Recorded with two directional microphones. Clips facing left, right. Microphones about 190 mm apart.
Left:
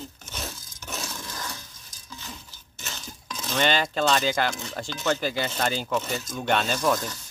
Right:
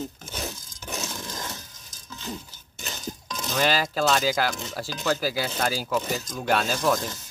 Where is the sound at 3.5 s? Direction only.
5° right (ahead or behind).